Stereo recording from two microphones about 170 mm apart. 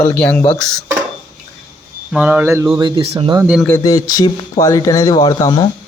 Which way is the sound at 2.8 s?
30° right (ahead or behind).